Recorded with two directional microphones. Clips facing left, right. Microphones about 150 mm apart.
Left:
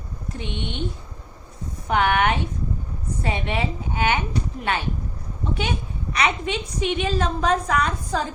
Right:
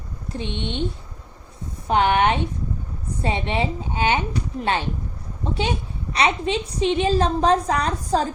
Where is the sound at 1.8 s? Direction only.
25° right (ahead or behind).